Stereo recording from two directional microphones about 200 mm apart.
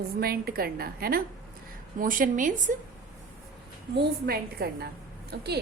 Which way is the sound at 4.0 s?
50° right (ahead or behind).